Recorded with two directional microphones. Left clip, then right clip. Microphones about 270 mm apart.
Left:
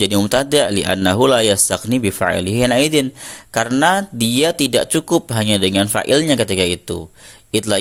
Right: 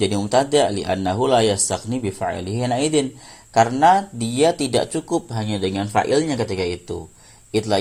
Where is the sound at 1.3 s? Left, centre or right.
Left.